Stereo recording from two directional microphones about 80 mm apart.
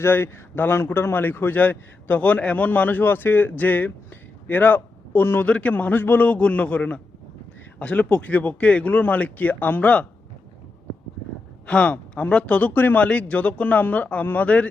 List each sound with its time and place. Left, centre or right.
0.0 s a man's voice: left
5.5 s speech: centre
11.6 s a man's voice: centre